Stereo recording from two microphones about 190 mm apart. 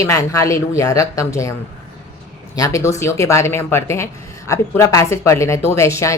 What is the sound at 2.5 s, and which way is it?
Speech, 15° left (ahead or behind).